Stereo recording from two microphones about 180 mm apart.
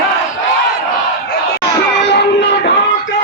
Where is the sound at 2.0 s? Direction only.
70° left (ahead or behind).